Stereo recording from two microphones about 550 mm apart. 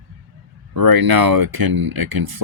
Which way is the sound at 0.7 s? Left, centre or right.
Right.